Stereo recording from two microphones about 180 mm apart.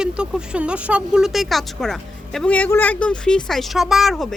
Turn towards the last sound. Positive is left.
turn(degrees=0)  # may be behind; listen again after turning